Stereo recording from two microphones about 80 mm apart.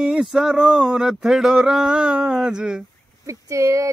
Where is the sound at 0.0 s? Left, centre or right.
Centre.